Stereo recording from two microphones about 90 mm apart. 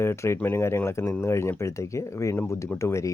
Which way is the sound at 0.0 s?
30° left (ahead or behind).